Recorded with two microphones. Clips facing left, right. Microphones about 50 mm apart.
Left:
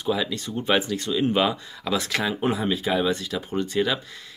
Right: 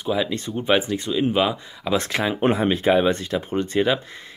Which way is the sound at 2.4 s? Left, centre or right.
Right.